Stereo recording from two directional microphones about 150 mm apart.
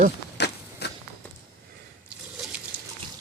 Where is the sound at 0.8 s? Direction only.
90° left.